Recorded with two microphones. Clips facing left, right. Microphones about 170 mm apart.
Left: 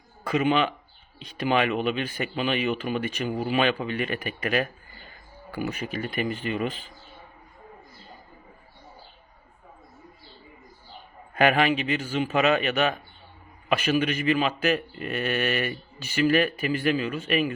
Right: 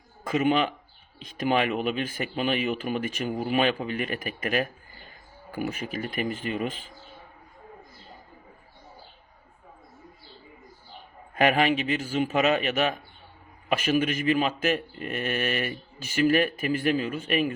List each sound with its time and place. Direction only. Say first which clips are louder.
0.3 s speech: left 1 dB; 45° right (ahead or behind)
6.1 s speech: left 1 dB; 45° right (ahead or behind)
11.3 s a man's voice: left 1 dB; 40° right (ahead or behind)
15.4 s speech: left 2 dB; 40° left (ahead or behind)
16.0 s speech: even; 45° right (ahead or behind)